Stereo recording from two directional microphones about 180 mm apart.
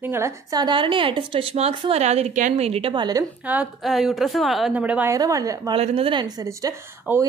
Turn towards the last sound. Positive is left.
turn(degrees=-20)  # may be behind; listen again after turning